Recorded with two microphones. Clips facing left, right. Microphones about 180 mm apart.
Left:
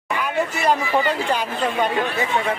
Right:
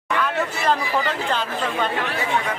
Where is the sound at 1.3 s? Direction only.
10° left (ahead or behind).